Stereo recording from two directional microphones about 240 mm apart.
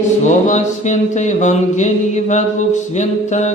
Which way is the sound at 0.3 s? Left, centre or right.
Left.